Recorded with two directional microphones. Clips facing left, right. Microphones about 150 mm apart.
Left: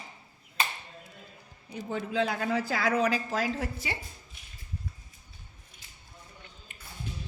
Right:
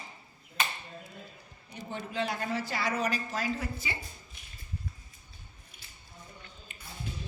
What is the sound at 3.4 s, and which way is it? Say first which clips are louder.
Speech: left 2 dB; 80° left.